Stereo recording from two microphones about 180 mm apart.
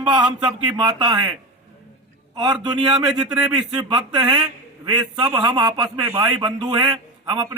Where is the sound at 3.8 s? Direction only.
20° right (ahead or behind).